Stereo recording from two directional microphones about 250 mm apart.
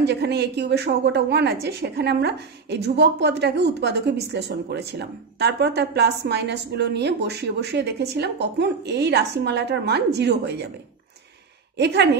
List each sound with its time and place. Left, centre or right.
0.0 s a woman's voice: right
11.7 s a woman's voice: right